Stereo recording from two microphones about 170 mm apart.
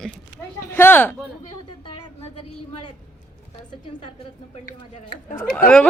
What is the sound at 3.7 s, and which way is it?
Speech, 30° left (ahead or behind).